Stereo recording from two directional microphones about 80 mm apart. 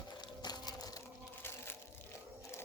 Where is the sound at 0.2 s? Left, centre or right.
Left.